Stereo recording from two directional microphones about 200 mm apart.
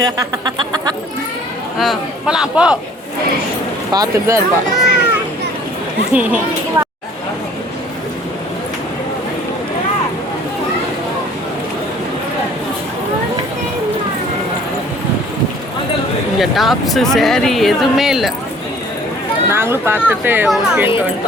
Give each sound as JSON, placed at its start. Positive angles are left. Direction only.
{"t": 0.0, "sound": "speech", "side_deg": -20}
{"t": 1.8, "sound": "speech", "side_deg": 0}
{"t": 3.9, "sound": "speech", "side_deg": -20}
{"t": 4.8, "sound": "children playing", "side_deg": -5}
{"t": 6.1, "sound": "speech", "side_deg": -10}
{"t": 16.4, "sound": "speech", "side_deg": 0}
{"t": 19.5, "sound": "speech", "side_deg": -10}